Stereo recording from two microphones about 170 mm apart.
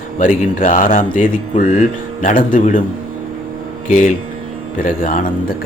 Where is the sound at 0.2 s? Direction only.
50° left (ahead or behind).